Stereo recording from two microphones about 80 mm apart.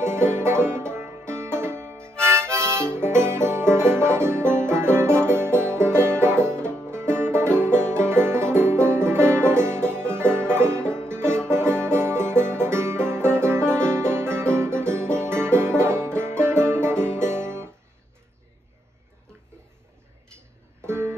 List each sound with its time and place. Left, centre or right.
0.0 s music: right
20.8 s music: right